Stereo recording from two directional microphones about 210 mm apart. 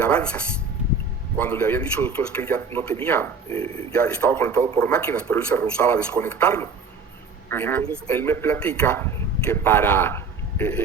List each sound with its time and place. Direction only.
0.0 s a man's voice: 5° left (ahead or behind)
3.5 s a man's voice: 30° right (ahead or behind)
3.9 s a man's voice: 5° left (ahead or behind)